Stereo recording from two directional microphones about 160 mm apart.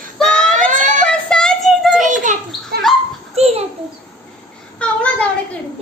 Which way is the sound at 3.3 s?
40° right (ahead or behind).